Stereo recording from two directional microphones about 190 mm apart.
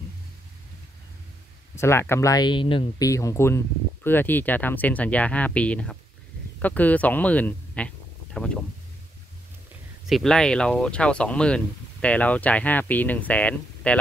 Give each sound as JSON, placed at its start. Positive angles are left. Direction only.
{"t": 1.8, "sound": "speech", "side_deg": 15}
{"t": 3.1, "sound": "speech", "side_deg": 15}
{"t": 10.0, "sound": "speech", "side_deg": 0}